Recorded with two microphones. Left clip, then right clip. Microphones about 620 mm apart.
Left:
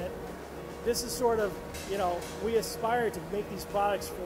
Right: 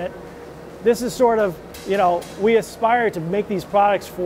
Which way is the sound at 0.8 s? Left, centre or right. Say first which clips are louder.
Right 12 dB; right.